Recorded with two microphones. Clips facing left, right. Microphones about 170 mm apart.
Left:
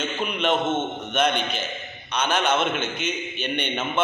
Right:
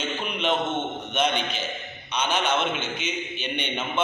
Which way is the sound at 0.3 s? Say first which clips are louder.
Left 3 dB; 55° left (ahead or behind).